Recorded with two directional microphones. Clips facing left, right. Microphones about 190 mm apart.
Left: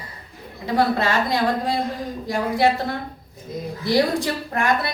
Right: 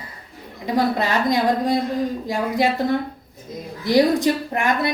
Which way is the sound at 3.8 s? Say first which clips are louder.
Right 4 dB; 20° right (ahead or behind).